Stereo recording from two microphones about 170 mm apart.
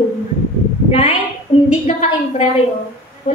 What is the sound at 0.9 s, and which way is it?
Speech, 30° left (ahead or behind).